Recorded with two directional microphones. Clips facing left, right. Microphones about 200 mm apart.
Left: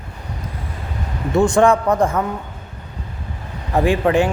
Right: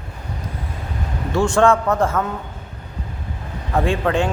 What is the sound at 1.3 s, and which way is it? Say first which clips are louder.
Speech: left 2 dB; 20° left (ahead or behind).